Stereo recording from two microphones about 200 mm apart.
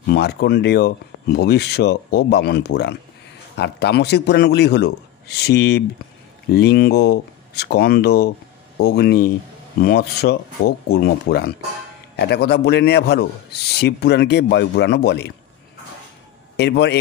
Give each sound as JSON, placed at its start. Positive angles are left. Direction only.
{"t": 0.0, "sound": "a man's voice", "side_deg": 55}
{"t": 16.5, "sound": "a man's voice", "side_deg": 60}